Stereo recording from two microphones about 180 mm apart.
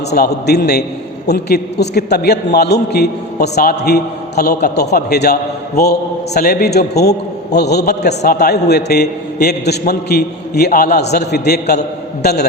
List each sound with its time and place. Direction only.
0.1 s a man's voice: 65° left (ahead or behind)